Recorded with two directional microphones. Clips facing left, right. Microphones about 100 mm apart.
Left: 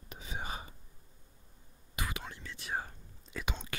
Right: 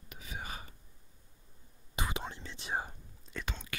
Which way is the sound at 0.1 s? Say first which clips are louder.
Left 3 dB; 25° left (ahead or behind).